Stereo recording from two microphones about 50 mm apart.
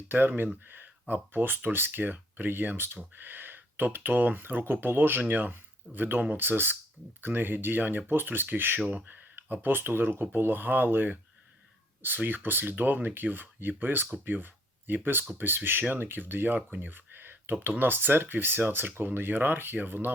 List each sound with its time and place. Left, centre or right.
0.1 s speech: right